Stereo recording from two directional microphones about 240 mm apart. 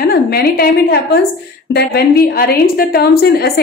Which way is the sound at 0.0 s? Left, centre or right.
Left.